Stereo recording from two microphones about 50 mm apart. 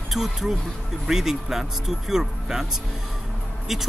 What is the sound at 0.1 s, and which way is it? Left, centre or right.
Speech, centre.